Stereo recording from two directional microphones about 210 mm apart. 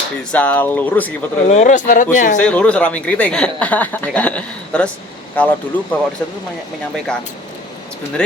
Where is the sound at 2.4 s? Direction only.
5° left (ahead or behind).